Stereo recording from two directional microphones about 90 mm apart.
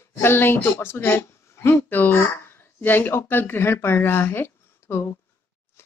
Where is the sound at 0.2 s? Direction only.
25° left (ahead or behind).